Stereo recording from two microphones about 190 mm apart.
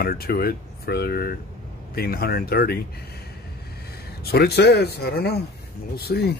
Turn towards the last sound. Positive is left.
turn(degrees=55)  # may be behind; listen again after turning